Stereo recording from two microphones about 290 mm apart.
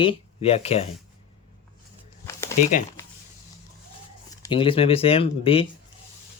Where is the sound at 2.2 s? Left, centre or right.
Centre.